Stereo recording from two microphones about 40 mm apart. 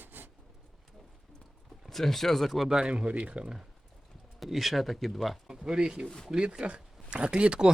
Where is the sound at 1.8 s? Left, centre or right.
Centre.